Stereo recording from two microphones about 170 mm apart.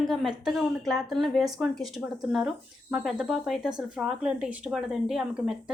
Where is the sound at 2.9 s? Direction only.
5° right (ahead or behind).